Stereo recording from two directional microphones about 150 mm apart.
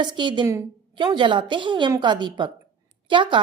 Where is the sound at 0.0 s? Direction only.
30° right (ahead or behind).